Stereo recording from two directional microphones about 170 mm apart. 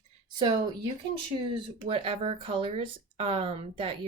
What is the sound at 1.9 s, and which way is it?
Speech, 35° right (ahead or behind).